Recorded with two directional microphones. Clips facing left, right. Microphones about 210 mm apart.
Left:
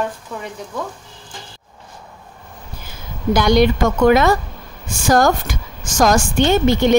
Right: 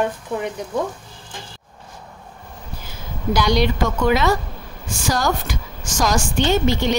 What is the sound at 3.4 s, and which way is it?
Speech, 55° left (ahead or behind).